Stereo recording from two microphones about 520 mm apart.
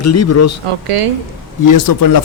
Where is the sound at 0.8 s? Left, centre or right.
Right.